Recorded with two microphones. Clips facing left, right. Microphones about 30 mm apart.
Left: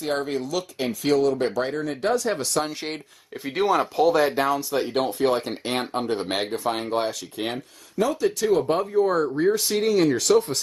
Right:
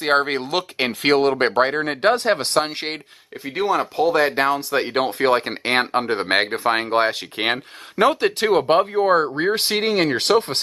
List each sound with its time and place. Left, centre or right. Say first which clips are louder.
0.0 s speech: right 7 dB; right
3.4 s speech: right 1 dB; centre; by 10.6 s right